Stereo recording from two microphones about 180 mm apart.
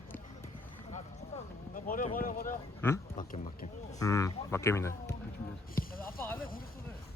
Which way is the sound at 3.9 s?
20° left (ahead or behind).